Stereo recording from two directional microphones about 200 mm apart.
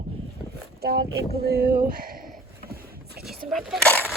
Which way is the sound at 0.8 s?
55° right (ahead or behind).